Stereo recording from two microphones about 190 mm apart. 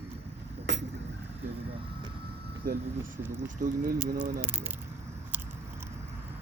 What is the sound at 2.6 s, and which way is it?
Speech, 50° right (ahead or behind).